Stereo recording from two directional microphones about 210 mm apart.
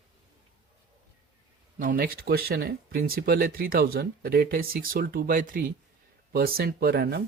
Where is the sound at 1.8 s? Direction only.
45° right (ahead or behind).